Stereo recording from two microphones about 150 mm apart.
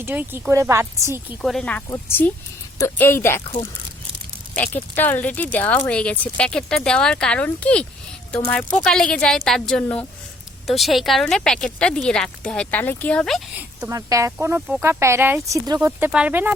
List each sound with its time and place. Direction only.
0.0 s speech: 15° right (ahead or behind)
1.4 s a woman's voice: 5° left (ahead or behind)
3.4 s speech: 35° left (ahead or behind)
4.5 s a woman's voice: 10° left (ahead or behind)
13.6 s a sound: 10° right (ahead or behind)
13.9 s speech: 20° right (ahead or behind)
16.0 s speech: 10° right (ahead or behind)